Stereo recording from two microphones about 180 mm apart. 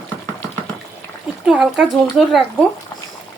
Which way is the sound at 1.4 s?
Centre (ahead or behind).